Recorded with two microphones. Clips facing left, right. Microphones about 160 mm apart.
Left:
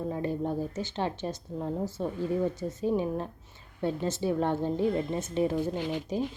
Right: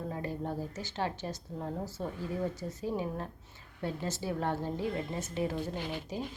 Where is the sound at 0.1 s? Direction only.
20° left (ahead or behind).